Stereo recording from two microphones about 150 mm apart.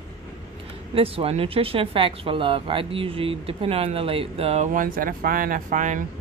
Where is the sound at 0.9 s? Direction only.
40° right (ahead or behind).